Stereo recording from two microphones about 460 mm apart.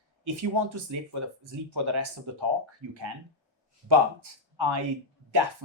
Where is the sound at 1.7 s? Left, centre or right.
Right.